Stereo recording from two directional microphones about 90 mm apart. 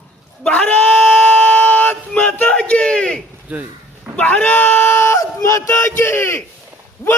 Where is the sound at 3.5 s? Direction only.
15° right (ahead or behind).